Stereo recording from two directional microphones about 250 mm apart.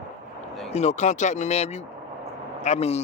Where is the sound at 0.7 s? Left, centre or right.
Left.